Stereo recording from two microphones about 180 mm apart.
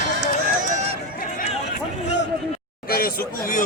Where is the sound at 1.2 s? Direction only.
50° left (ahead or behind).